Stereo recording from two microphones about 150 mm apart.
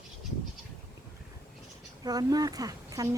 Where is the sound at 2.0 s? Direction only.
25° right (ahead or behind).